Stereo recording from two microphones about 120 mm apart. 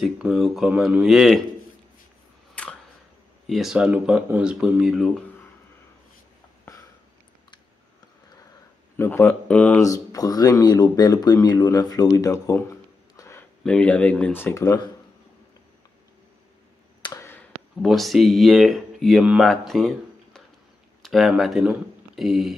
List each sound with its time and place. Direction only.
0.0 s speech: centre (ahead or behind)
2.6 s a sound: 10° left (ahead or behind)
3.4 s speech: centre (ahead or behind)
8.9 s speech: 20° left (ahead or behind)
9.8 s speech: 30° left (ahead or behind)
13.4 s speech: 10° left (ahead or behind); by 14.9 s 30° left (ahead or behind)
17.2 s a sound: 15° left (ahead or behind)
17.8 s speech: centre (ahead or behind)